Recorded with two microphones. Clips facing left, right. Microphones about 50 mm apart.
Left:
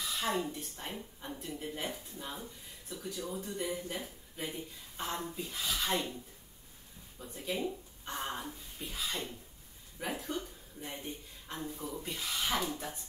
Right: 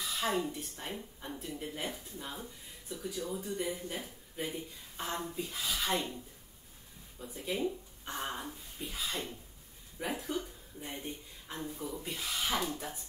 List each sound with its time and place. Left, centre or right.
0.0 s speech: centre
7.4 s speech: centre